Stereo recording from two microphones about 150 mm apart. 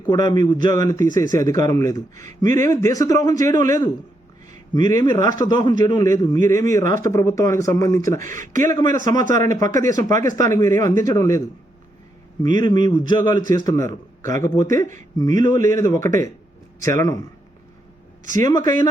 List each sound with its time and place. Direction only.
0.1 s speech: 25° left (ahead or behind)
18.3 s speech: 20° left (ahead or behind)